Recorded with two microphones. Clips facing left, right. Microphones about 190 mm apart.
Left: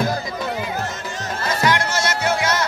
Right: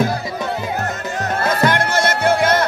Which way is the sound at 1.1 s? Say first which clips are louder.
Right 8 dB; 60° right (ahead or behind).